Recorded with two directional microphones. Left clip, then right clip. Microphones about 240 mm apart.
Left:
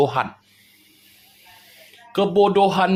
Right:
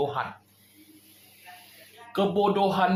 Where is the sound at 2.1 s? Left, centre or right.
Left.